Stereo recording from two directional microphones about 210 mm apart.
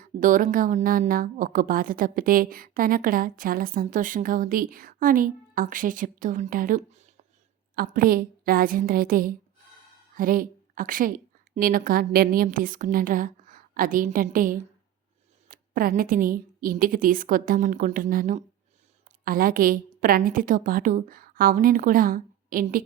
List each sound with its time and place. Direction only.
0.0 s a woman's voice: 40° right (ahead or behind)